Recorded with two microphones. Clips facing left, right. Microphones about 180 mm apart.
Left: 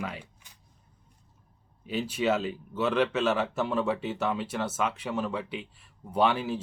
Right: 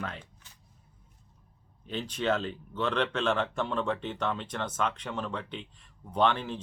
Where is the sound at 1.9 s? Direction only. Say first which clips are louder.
Left 3 dB; 5° left (ahead or behind).